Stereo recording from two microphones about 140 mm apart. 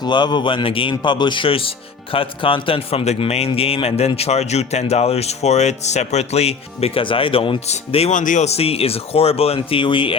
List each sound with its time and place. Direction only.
0.0 s a man's voice: 30° left (ahead or behind)
7.7 s a man's voice: 50° left (ahead or behind)
8.2 s a man's voice: 60° left (ahead or behind); by 10.2 s 40° left (ahead or behind)